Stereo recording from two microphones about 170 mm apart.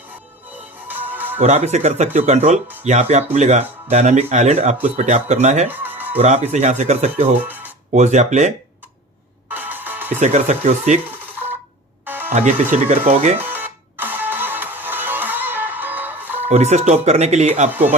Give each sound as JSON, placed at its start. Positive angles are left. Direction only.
{"t": 0.9, "sound": "music", "side_deg": -10}
{"t": 1.4, "sound": "speech", "side_deg": -40}
{"t": 5.6, "sound": "music", "side_deg": -10}
{"t": 6.1, "sound": "speech", "side_deg": -40}
{"t": 7.3, "sound": "speech", "side_deg": -10}
{"t": 7.9, "sound": "speech", "side_deg": -45}
{"t": 9.5, "sound": "music", "side_deg": -10}
{"t": 10.2, "sound": "speech", "side_deg": -40}
{"t": 11.2, "sound": "telephone dialing", "side_deg": -10}
{"t": 12.0, "sound": "music", "side_deg": -10}
{"t": 12.3, "sound": "speech", "side_deg": -40}
{"t": 13.4, "sound": "music", "side_deg": -10}
{"t": 16.5, "sound": "speech", "side_deg": -40}
{"t": 17.7, "sound": "speech", "side_deg": -10}